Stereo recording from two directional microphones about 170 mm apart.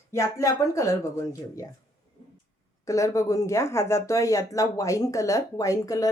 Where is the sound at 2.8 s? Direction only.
20° left (ahead or behind).